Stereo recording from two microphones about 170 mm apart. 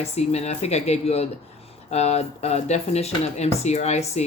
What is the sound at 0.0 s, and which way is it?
Speech, 40° left (ahead or behind).